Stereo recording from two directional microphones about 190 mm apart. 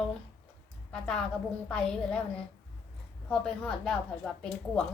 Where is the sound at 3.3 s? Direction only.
5° left (ahead or behind).